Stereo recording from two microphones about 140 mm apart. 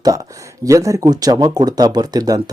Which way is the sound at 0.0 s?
25° right (ahead or behind).